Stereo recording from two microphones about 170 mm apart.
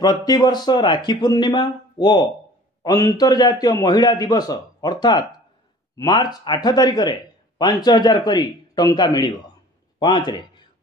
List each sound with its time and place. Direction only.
0.0 s speech: 25° left (ahead or behind)